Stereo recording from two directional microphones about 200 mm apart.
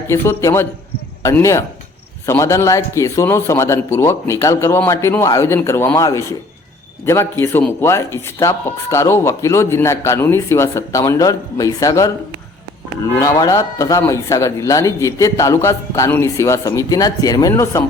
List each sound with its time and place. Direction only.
0.1 s speech: 15° left (ahead or behind)